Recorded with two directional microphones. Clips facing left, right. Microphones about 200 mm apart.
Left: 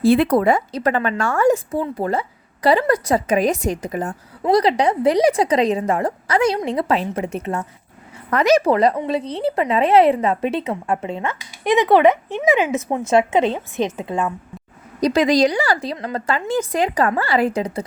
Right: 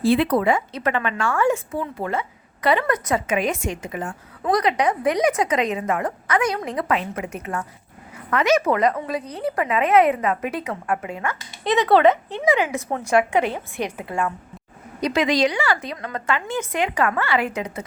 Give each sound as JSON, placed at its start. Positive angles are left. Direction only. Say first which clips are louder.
{"t": 0.0, "sound": "a woman's voice", "louder": "left 4 dB", "side_deg": 45}
{"t": 15.0, "sound": "a woman's voice", "louder": "left 4 dB", "side_deg": 35}